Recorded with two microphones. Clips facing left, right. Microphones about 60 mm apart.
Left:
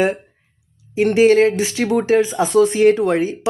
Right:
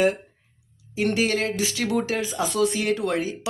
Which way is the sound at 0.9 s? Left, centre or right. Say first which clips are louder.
Left 11 dB; left.